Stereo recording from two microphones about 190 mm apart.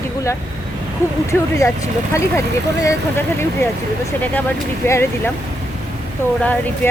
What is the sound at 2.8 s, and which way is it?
Speech, 10° left (ahead or behind).